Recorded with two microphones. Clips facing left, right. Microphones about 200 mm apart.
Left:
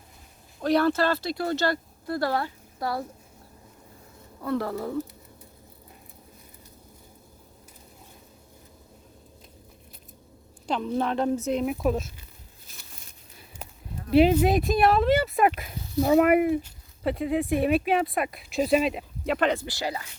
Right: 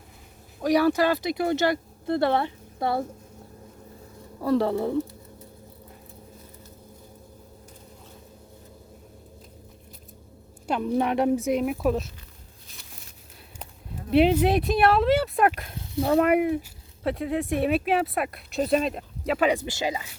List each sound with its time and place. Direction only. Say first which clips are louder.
0.6 s speech: right 2 dB; 10° right (ahead or behind)
4.4 s speech: right 5 dB; 30° right (ahead or behind)
10.7 s speech: right 2 dB; 10° right (ahead or behind)
11.6 s speech: right 1 dB; centre (ahead or behind)
14.1 s speech: even; centre (ahead or behind)
19.5 s speech: right 2 dB; 20° right (ahead or behind)